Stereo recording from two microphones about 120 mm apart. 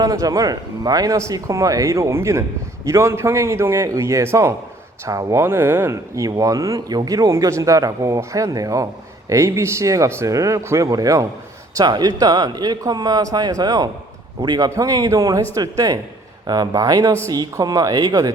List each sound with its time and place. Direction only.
0.0 s a man's voice: 30° right (ahead or behind)